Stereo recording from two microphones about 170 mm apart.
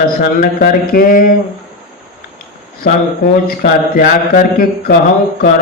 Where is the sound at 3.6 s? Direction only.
50° left (ahead or behind).